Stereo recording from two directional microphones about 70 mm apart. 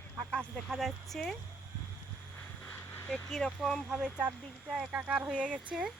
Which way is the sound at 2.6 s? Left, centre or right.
Left.